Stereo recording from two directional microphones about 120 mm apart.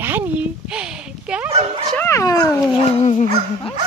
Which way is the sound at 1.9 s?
20° left (ahead or behind).